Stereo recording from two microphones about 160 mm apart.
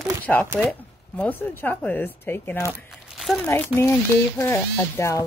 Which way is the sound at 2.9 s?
Centre (ahead or behind).